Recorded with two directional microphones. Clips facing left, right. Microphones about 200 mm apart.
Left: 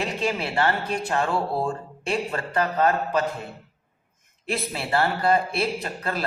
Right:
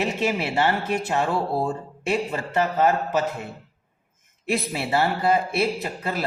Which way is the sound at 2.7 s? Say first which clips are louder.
Right 1 dB; 10° right (ahead or behind).